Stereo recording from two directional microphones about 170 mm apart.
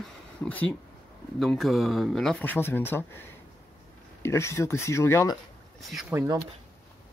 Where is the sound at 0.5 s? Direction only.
10° left (ahead or behind).